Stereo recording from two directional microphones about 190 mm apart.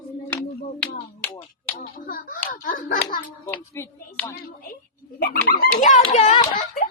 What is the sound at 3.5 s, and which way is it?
Speech, 10° left (ahead or behind).